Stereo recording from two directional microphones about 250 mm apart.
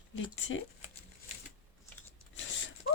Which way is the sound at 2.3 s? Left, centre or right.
Left.